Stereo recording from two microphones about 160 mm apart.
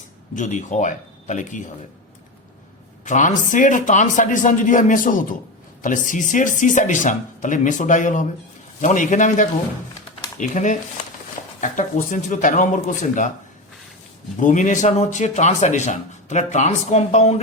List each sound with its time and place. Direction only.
0.3 s a man's voice: 50° left (ahead or behind)
3.0 s a man's voice: 50° left (ahead or behind)
14.3 s a man's voice: 50° left (ahead or behind)